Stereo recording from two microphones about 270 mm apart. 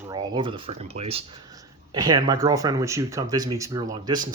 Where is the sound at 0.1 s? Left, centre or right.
Centre.